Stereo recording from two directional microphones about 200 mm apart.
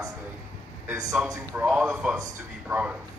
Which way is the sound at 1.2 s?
10° right (ahead or behind).